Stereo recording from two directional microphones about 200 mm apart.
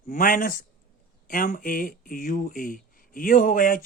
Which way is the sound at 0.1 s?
45° left (ahead or behind).